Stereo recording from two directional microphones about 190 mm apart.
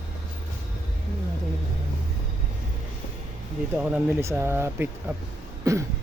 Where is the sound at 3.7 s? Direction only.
5° right (ahead or behind).